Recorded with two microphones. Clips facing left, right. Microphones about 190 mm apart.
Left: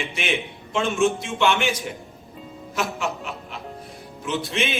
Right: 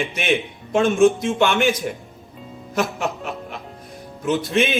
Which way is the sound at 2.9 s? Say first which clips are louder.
Right 3 dB; 45° right (ahead or behind).